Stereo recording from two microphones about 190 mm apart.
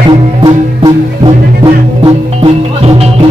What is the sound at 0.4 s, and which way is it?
Music, 25° right (ahead or behind).